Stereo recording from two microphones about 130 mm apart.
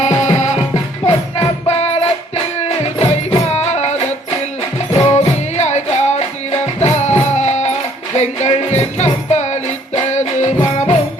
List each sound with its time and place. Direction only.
0.0 s music: 65° left (ahead or behind)
1.0 s music: 55° left (ahead or behind)
5.0 s music: 60° left (ahead or behind)